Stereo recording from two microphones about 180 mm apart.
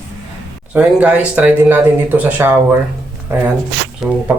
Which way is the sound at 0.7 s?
5° right (ahead or behind).